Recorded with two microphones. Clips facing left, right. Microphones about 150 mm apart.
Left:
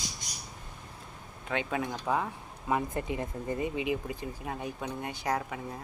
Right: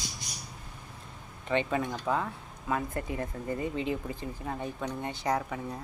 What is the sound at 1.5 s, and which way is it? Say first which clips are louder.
Speech: right 3 dB; 5° left (ahead or behind).